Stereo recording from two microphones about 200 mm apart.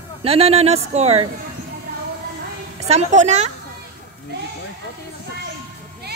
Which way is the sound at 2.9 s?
35° right (ahead or behind).